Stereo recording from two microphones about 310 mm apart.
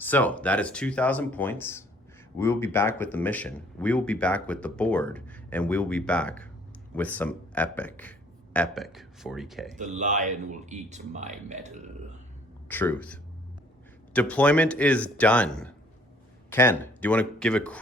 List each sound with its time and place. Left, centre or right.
0.0 s speech: centre
9.7 s speech: right
12.6 s speech: centre